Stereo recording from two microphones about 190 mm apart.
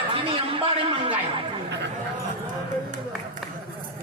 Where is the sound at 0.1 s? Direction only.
30° right (ahead or behind).